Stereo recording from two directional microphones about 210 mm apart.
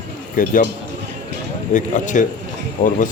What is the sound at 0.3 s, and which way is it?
Speech, 40° left (ahead or behind).